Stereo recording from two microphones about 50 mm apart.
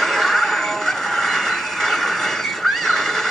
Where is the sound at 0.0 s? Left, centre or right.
Centre.